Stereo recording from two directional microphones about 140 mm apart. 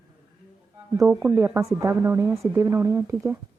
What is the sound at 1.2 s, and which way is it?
Speech, 15° right (ahead or behind).